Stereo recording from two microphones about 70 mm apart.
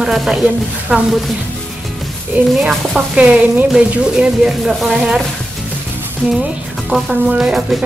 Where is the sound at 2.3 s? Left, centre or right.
Right; by 5.2 s centre.